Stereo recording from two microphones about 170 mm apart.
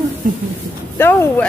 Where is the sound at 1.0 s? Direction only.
10° left (ahead or behind).